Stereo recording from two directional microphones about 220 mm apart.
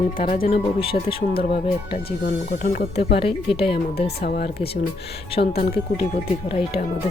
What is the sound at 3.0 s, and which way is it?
Speech, 25° left (ahead or behind).